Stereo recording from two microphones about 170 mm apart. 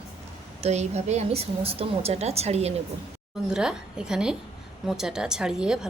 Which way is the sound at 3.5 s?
5° right (ahead or behind).